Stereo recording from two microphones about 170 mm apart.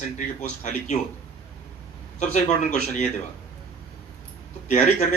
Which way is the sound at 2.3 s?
45° left (ahead or behind).